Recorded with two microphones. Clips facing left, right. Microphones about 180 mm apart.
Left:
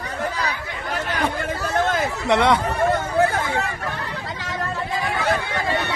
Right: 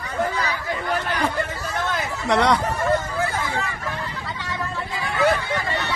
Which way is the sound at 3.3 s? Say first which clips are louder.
Left 3 dB; 60° left (ahead or behind).